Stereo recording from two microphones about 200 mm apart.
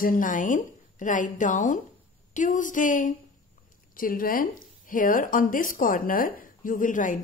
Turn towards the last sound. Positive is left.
turn(degrees=40)  # may be behind; listen again after turning